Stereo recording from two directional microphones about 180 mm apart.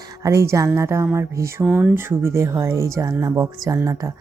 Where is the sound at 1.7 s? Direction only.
5° right (ahead or behind).